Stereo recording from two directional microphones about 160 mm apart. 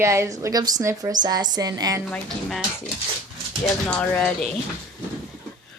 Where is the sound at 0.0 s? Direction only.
20° right (ahead or behind).